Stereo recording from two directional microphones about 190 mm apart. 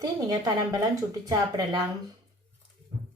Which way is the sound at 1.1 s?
20° right (ahead or behind).